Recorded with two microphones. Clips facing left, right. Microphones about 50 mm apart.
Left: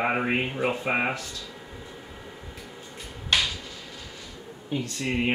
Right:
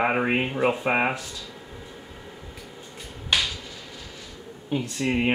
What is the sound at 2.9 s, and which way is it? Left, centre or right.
Finger snapping, centre.